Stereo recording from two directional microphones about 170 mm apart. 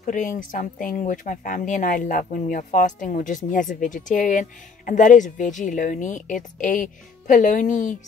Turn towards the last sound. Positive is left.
turn(degrees=45)  # may be behind; listen again after turning